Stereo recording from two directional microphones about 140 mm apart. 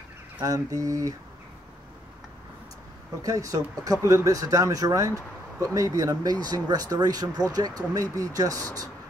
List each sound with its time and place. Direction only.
0.4 s speech: 25° right (ahead or behind)
3.2 s speech: 25° right (ahead or behind)